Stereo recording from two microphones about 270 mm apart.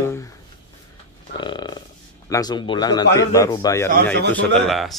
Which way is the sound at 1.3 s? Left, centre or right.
Centre.